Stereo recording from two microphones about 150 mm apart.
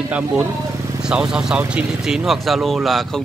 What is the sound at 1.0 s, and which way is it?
Speech, 5° right (ahead or behind).